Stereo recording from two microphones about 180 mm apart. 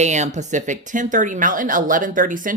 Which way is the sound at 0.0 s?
40° right (ahead or behind).